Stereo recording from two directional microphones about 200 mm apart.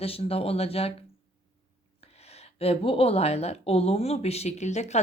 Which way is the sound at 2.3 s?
30° left (ahead or behind).